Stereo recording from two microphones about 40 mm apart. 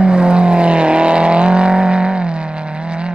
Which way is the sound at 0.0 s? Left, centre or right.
Right.